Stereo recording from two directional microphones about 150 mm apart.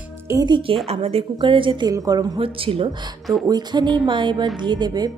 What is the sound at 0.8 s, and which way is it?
A woman's voice, 40° right (ahead or behind).